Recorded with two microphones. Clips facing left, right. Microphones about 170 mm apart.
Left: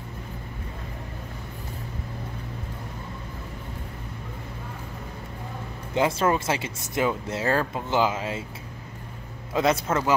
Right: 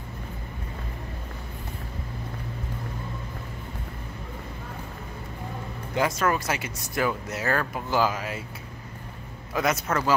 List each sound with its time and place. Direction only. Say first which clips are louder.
5.9 s speech: left 2 dB; 25° left (ahead or behind)
9.5 s speech: left 3 dB; 25° left (ahead or behind)